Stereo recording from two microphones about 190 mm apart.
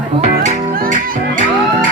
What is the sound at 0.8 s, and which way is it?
Music, 45° right (ahead or behind).